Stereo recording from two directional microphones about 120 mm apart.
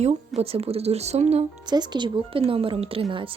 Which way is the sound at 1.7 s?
40° right (ahead or behind).